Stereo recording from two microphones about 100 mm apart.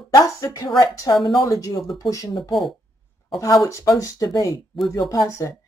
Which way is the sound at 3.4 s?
35° left (ahead or behind).